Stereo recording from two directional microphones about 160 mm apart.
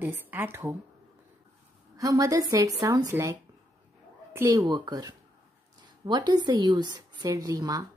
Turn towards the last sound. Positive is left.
turn(degrees=-20)  # may be behind; listen again after turning